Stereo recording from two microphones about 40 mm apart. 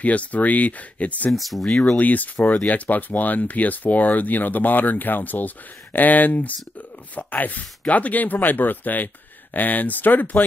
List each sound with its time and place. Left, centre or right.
0.0 s speech: left
1.3 s speech: centre
1.6 s speech: left
2.0 s speech: left